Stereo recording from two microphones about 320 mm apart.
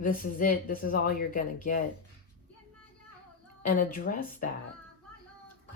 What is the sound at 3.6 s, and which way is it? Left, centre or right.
Speech, left.